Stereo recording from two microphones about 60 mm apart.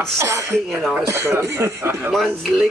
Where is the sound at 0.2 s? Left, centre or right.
Right.